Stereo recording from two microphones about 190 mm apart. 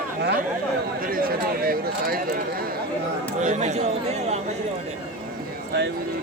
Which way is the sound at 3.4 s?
40° right (ahead or behind).